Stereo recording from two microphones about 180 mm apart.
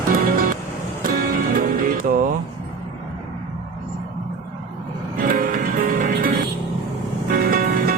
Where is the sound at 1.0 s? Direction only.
55° right (ahead or behind).